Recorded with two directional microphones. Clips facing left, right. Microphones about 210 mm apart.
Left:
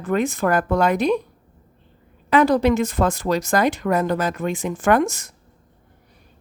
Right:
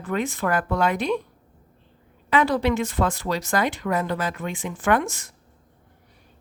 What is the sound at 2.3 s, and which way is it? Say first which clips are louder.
Speech: left 5 dB; 45° left (ahead or behind).